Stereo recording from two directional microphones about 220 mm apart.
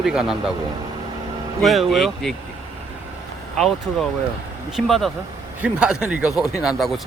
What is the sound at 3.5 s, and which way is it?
Speech, centre (ahead or behind).